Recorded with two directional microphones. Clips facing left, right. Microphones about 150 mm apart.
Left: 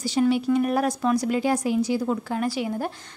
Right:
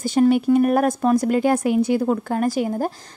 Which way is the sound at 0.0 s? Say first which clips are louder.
Right 5 dB; 50° right (ahead or behind).